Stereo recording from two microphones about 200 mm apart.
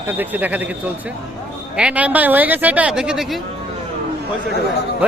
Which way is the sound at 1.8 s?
5° right (ahead or behind).